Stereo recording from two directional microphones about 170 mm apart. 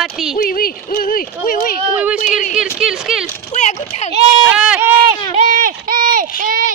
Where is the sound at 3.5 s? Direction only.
40° left (ahead or behind).